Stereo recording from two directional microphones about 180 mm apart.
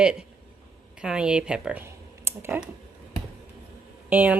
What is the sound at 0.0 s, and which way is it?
Speech, 5° right (ahead or behind).